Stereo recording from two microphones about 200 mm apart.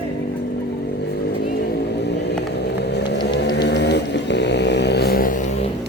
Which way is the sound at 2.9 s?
55° left (ahead or behind).